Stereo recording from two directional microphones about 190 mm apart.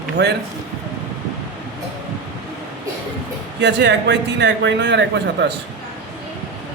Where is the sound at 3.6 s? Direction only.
65° right (ahead or behind).